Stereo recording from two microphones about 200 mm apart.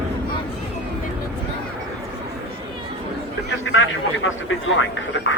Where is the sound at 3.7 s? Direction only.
75° left (ahead or behind).